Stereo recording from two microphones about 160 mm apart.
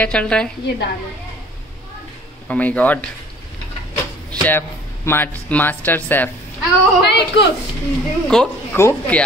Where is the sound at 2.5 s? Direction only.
10° left (ahead or behind).